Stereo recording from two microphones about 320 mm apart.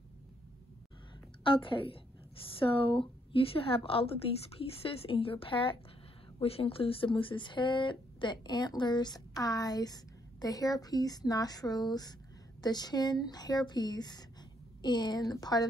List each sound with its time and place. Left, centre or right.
1.4 s a woman's voice: centre